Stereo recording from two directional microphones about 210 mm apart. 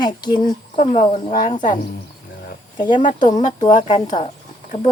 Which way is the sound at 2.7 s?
20° left (ahead or behind).